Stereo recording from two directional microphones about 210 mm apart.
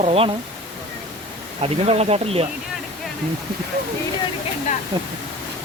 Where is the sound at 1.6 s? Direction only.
30° right (ahead or behind).